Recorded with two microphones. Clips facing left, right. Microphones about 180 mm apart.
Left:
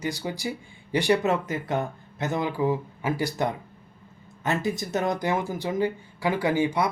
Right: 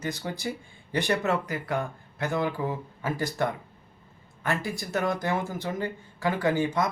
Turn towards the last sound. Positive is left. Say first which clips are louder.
# left 2 dB
turn(degrees=15)  # may be behind; listen again after turning